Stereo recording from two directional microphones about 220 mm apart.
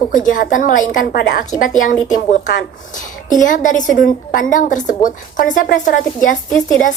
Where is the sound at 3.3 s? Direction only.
35° left (ahead or behind).